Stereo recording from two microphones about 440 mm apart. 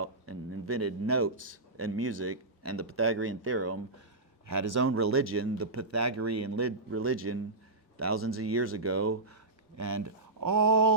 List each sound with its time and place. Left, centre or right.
0.0 s a sound: right
1.7 s speech: right
4.4 s speech: right